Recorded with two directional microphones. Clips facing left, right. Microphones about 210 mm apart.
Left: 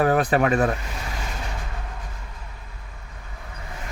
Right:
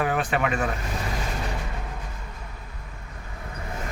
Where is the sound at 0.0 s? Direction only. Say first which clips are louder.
Left 5 dB; 40° left (ahead or behind).